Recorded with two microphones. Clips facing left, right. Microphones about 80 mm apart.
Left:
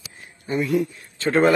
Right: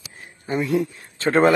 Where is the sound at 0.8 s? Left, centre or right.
Right.